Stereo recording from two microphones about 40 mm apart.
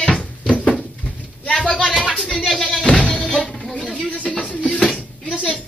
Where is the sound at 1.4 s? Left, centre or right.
Left.